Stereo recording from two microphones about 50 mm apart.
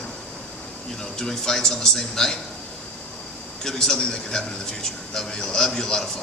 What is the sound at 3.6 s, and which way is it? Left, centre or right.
A man's voice, centre.